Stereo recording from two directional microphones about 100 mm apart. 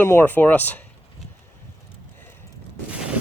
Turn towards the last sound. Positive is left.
turn(degrees=-10)  # may be behind; listen again after turning